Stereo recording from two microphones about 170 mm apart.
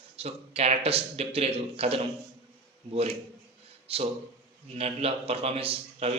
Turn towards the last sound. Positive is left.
turn(degrees=-35)  # may be behind; listen again after turning